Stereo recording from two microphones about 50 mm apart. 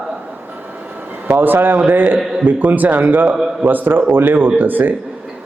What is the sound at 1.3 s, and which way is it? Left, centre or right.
A man's voice, right.